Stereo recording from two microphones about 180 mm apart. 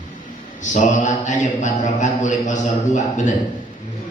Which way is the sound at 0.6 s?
45° left (ahead or behind).